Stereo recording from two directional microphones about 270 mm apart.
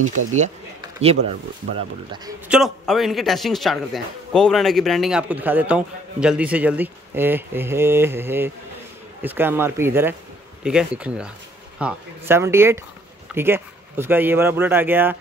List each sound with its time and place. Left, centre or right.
0.2 s speech: right
1.2 s speech: right
2.4 s speech: centre